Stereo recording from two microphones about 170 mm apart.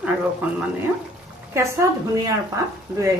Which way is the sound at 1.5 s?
20° right (ahead or behind).